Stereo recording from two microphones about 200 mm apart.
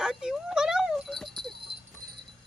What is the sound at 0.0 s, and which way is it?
Dog, 5° right (ahead or behind).